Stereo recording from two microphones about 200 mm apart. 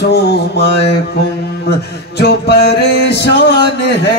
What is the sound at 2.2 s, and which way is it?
Music, 55° left (ahead or behind).